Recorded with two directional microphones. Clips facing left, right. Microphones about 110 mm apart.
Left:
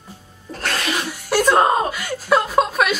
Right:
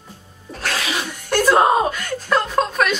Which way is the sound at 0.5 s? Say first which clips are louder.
Left 1 dB; centre (ahead or behind).